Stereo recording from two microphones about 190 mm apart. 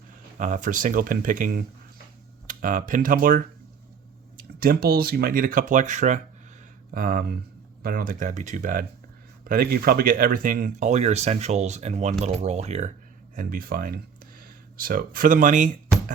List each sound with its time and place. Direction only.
0.3 s speech: 40° right (ahead or behind)
4.6 s speech: 50° right (ahead or behind); by 12.9 s 35° right (ahead or behind)
13.3 s speech: 50° right (ahead or behind)